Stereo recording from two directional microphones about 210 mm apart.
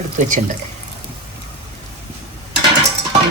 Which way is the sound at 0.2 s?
35° right (ahead or behind).